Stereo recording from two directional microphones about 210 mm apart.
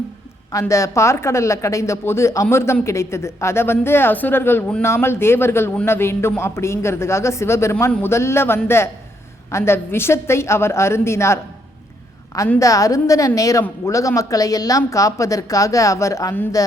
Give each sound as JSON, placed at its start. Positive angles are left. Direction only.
{"t": 0.5, "sound": "a woman's voice", "side_deg": 15}